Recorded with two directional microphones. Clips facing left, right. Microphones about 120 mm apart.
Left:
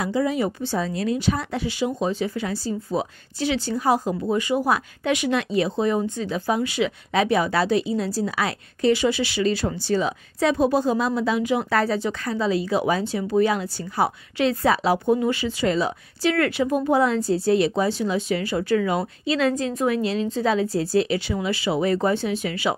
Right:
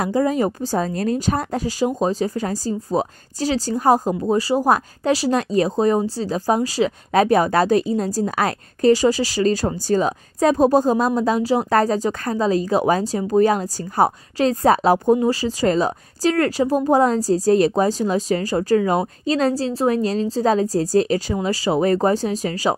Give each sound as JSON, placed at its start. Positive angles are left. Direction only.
{"t": 0.0, "sound": "speech", "side_deg": -45}